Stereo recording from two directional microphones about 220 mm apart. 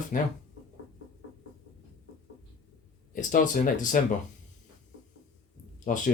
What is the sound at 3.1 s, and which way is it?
Speech, 35° left (ahead or behind).